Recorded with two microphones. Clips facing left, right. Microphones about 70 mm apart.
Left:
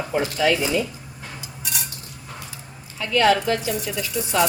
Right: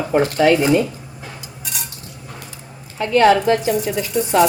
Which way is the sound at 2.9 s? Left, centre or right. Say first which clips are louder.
Right 5 dB; right.